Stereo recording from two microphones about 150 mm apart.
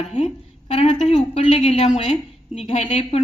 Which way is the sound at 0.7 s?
40° left (ahead or behind).